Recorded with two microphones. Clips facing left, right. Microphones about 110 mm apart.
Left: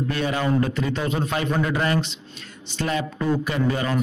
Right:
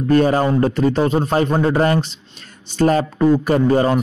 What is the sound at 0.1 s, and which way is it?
A man's voice, 40° right (ahead or behind).